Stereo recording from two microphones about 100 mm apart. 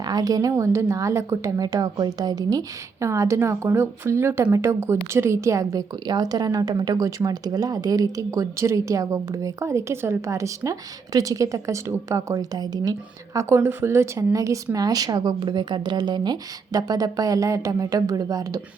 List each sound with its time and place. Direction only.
0.0 s a woman's voice: 40° right (ahead or behind)